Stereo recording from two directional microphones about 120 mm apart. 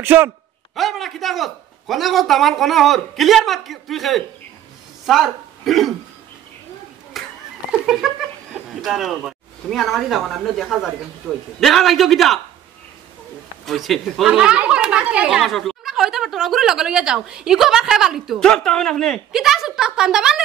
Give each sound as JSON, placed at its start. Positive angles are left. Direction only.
{"t": 0.0, "sound": "a man's voice", "side_deg": -20}
{"t": 0.7, "sound": "speech", "side_deg": 0}
{"t": 7.2, "sound": "a sound", "side_deg": 0}
{"t": 8.8, "sound": "speech", "side_deg": 0}
{"t": 13.7, "sound": "speech", "side_deg": 0}